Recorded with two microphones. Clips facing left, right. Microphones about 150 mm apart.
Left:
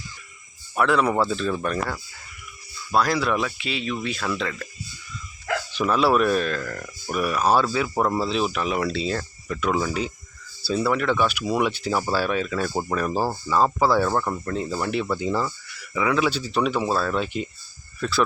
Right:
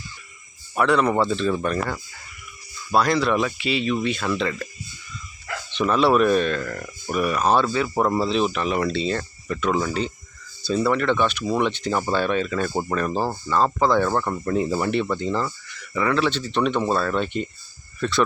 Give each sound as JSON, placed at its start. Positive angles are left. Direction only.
{"t": 0.8, "sound": "speech", "side_deg": 0}
{"t": 5.7, "sound": "speech", "side_deg": 5}
{"t": 14.4, "sound": "speech", "side_deg": -10}
{"t": 14.8, "sound": "speech", "side_deg": 0}